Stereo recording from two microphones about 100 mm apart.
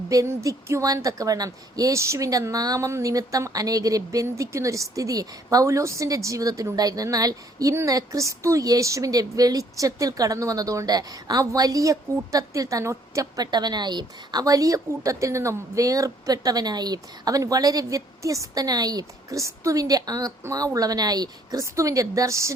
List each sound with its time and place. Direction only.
0.1 s a woman's voice: 35° right (ahead or behind)